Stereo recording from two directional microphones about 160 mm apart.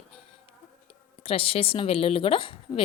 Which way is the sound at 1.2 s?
35° left (ahead or behind).